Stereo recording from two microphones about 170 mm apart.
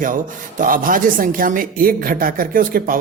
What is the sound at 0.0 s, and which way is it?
A woman's voice, 50° right (ahead or behind).